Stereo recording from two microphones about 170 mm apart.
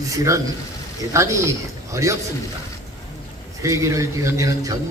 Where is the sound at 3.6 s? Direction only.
20° right (ahead or behind).